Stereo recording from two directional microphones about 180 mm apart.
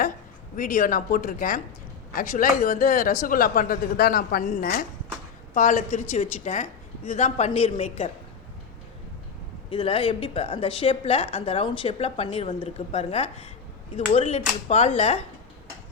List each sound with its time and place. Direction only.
0.5 s a woman's voice: 45° left (ahead or behind)
9.6 s a woman's voice: 30° left (ahead or behind)